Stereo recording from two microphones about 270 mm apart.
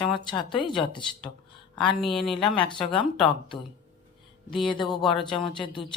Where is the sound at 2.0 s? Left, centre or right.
Centre.